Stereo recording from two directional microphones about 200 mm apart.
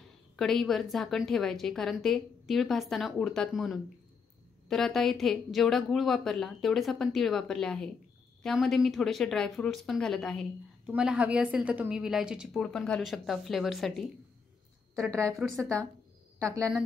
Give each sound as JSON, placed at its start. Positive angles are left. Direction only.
{"t": 0.4, "sound": "a woman's voice", "side_deg": 0}
{"t": 15.0, "sound": "a woman's voice", "side_deg": -15}
{"t": 16.3, "sound": "a woman's voice", "side_deg": -15}